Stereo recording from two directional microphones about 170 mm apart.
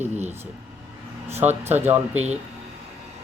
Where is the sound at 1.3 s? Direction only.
15° right (ahead or behind).